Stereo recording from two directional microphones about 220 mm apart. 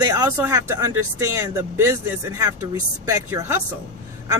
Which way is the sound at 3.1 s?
10° right (ahead or behind).